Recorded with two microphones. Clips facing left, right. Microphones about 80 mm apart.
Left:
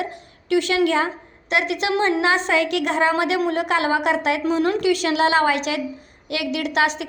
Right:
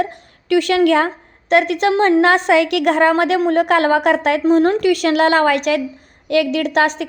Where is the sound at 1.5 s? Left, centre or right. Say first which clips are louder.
Right 7 dB; right.